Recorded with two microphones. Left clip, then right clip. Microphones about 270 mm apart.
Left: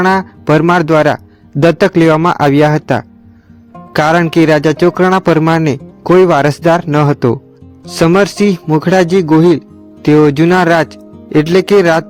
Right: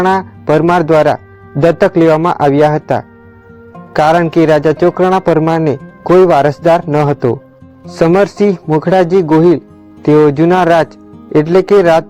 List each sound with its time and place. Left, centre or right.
0.0 s speech: left
6.0 s speech: left